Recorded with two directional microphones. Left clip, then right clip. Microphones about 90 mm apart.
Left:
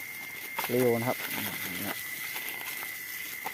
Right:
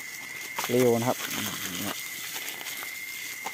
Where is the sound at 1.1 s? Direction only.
85° right; by 2.0 s 65° right (ahead or behind).